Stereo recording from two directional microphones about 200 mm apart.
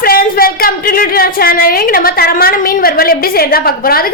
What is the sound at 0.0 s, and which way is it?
A woman's voice, 45° left (ahead or behind).